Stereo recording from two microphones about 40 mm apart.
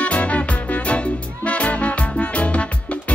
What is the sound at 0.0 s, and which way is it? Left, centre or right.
Music, left.